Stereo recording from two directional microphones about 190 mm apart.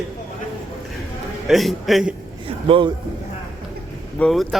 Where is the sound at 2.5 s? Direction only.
30° right (ahead or behind).